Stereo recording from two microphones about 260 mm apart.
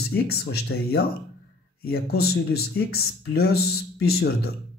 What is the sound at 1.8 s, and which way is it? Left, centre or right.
Speech, left.